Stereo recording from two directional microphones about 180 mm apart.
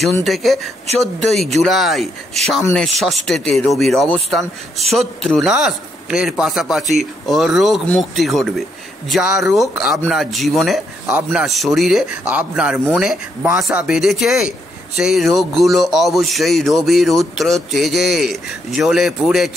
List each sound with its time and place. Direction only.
0.2 s speech: centre (ahead or behind)